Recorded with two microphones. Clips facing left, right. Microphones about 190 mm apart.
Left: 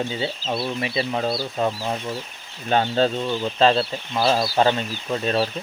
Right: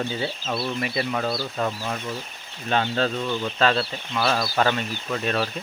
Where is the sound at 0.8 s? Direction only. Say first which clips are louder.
Left 2 dB; 20° left (ahead or behind).